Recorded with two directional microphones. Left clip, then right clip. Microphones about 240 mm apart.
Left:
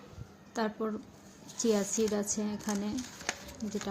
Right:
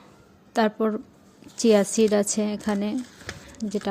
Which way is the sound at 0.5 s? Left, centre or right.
Right.